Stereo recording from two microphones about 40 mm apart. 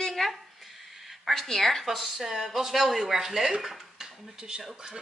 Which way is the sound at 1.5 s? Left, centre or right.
Centre.